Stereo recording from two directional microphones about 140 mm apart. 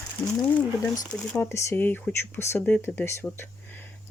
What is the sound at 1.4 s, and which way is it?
Speech, 20° left (ahead or behind).